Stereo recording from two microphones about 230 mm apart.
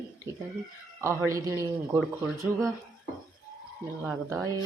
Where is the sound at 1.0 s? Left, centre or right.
Centre.